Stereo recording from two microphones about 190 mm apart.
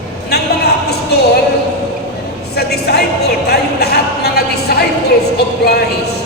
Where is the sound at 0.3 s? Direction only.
60° left (ahead or behind).